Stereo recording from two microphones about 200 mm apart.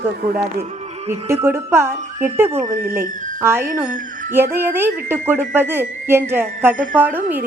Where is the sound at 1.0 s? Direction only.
15° right (ahead or behind).